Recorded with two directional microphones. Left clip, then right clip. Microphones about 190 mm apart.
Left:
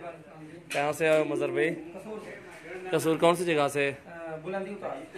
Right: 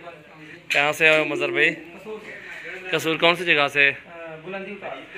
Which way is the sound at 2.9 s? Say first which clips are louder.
Right 4 dB; 15° left (ahead or behind).